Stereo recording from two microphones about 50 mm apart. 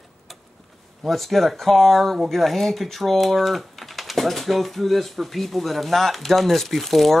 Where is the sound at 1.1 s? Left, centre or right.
Centre.